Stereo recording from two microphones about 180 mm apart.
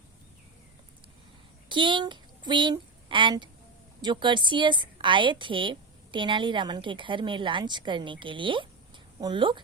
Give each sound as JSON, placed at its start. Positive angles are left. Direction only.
{"t": 1.7, "sound": "a woman's voice", "side_deg": -25}